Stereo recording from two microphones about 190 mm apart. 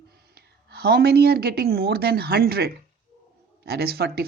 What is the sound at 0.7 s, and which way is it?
Speech, 55° right (ahead or behind).